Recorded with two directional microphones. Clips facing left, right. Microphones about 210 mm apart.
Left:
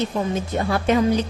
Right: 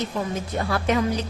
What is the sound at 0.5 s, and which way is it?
Speech, 25° left (ahead or behind).